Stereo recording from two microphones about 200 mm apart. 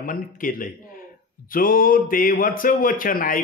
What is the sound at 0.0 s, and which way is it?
A man's voice, 45° left (ahead or behind).